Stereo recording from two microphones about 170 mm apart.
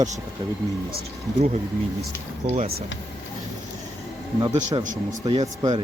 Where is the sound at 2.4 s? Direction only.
45° right (ahead or behind).